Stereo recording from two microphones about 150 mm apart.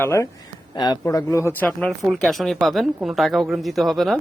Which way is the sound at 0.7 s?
25° left (ahead or behind).